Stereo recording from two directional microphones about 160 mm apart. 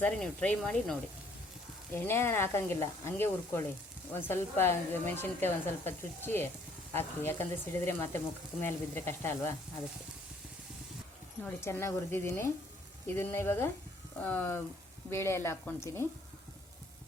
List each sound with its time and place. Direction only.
0.0 s speech: 10° left (ahead or behind)
2.0 s a woman's voice: 15° left (ahead or behind)
11.4 s a woman's voice: 15° left (ahead or behind)